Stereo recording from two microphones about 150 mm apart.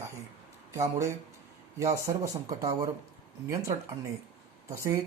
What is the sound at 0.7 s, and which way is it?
Speech, 20° right (ahead or behind).